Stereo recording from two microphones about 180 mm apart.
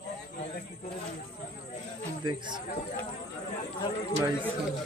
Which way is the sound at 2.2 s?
25° right (ahead or behind).